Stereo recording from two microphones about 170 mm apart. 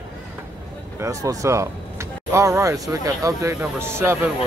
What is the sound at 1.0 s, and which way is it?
Speech, 20° right (ahead or behind).